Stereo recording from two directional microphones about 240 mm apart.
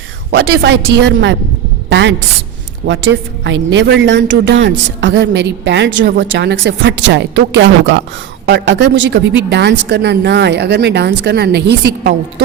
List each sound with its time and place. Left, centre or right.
0.3 s a woman's voice: right